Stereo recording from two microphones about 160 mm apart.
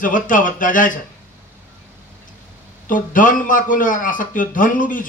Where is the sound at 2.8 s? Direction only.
55° left (ahead or behind).